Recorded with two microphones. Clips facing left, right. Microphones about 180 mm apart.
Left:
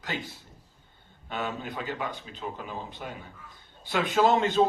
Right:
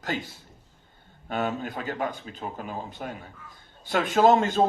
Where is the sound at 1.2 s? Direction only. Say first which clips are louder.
Right 5 dB; 45° right (ahead or behind).